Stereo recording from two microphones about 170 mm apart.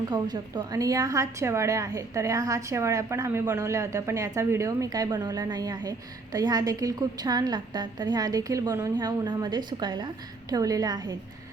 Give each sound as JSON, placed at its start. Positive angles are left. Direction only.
{"t": 0.0, "sound": "a woman's voice", "side_deg": -25}